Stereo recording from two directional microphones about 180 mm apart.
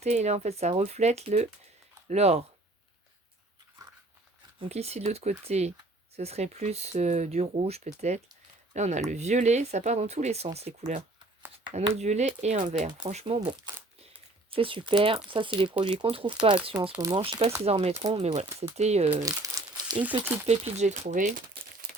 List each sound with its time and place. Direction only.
0.0 s speech: 40° right (ahead or behind)
4.7 s speech: 35° right (ahead or behind)
19.1 s crumpling: 20° right (ahead or behind)
20.0 s speech: 10° right (ahead or behind)
20.5 s speech: 40° right (ahead or behind)